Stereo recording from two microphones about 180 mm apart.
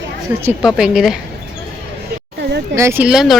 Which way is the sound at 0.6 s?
5° right (ahead or behind).